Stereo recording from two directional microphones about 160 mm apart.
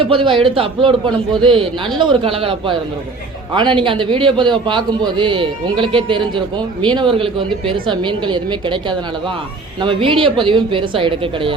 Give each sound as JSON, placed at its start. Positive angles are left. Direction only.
{"t": 0.0, "sound": "a man's voice", "side_deg": -35}